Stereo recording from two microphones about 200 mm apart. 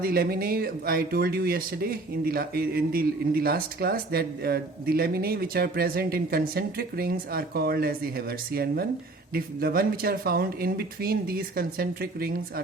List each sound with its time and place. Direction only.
0.0 s speech: 50° right (ahead or behind)